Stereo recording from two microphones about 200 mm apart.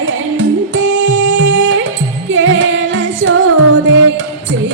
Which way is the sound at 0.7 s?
70° right (ahead or behind).